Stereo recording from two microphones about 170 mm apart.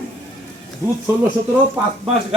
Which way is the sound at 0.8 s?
15° right (ahead or behind).